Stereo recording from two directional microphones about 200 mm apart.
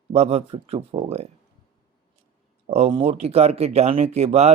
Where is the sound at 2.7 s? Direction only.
30° right (ahead or behind).